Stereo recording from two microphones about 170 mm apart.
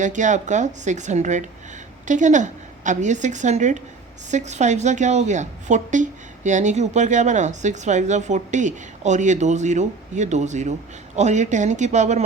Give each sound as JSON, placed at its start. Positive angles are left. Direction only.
{"t": 0.0, "sound": "a woman's voice", "side_deg": -45}